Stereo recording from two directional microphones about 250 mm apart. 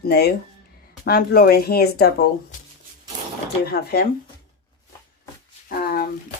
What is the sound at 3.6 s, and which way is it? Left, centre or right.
Speech, left.